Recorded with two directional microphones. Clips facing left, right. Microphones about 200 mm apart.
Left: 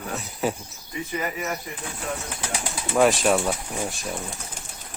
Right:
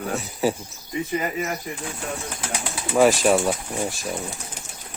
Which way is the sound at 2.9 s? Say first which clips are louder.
Right 2 dB; centre (ahead or behind).